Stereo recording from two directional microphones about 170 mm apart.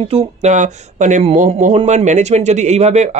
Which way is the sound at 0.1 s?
40° right (ahead or behind).